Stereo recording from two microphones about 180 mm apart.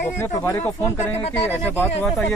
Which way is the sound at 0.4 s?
15° left (ahead or behind).